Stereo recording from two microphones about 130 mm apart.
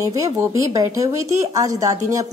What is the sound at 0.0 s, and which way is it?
A woman's voice, 25° right (ahead or behind).